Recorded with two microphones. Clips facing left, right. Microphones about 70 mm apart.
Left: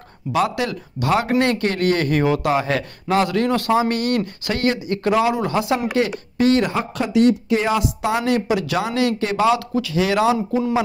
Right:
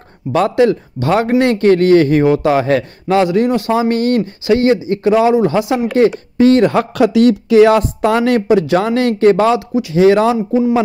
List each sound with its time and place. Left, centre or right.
0.3 s a man's voice: right
3.3 s speech: right
3.9 s a man's voice: right
6.7 s speech: right
7.7 s a woman's voice: right
8.4 s a man's voice: right
9.8 s speech: right
10.0 s a man's voice: right